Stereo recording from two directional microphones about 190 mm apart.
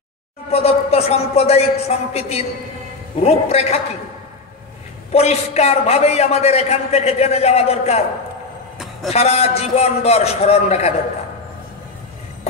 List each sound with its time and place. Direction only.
0.5 s a man's voice: 35° left (ahead or behind)
5.1 s a man's voice: 35° left (ahead or behind)
9.1 s a man's voice: 35° left (ahead or behind)